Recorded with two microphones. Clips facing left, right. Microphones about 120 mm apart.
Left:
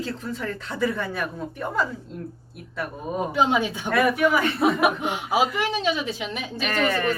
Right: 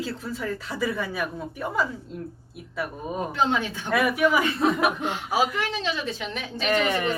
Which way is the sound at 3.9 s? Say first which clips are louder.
Left 1 dB; 5° right (ahead or behind).